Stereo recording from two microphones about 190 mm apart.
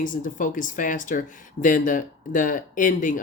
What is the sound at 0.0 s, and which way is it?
Speech, 45° left (ahead or behind).